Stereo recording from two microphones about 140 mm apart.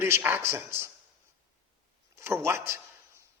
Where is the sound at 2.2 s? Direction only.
20° right (ahead or behind).